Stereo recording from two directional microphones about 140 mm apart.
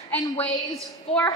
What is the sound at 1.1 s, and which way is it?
Speech, 45° left (ahead or behind).